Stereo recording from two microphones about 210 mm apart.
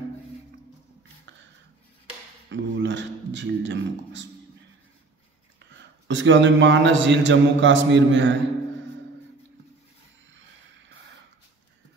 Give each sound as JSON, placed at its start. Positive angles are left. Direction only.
{"t": 2.5, "sound": "a man's voice", "side_deg": -60}
{"t": 5.6, "sound": "a man's voice", "side_deg": -60}